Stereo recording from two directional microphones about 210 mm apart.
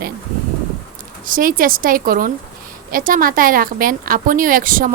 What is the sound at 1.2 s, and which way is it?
Speech, 40° right (ahead or behind).